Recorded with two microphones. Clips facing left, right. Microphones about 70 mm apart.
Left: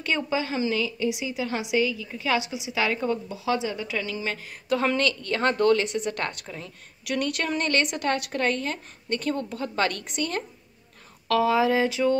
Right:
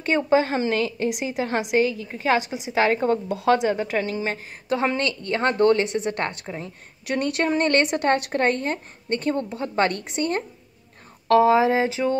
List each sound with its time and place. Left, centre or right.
0.0 s a woman's voice: right
3.3 s a woman's voice: right
11.2 s a sound: right